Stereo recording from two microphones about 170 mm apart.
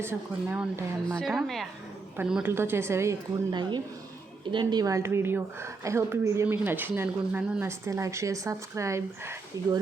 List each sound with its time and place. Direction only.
0.0 s a woman's voice: 10° right (ahead or behind)
1.0 s a woman's voice: centre (ahead or behind); by 9.3 s 15° right (ahead or behind)